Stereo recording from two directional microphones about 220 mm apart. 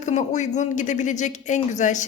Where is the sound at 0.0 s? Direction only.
35° left (ahead or behind).